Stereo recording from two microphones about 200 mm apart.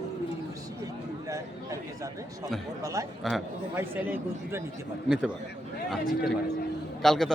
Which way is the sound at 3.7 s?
10° right (ahead or behind).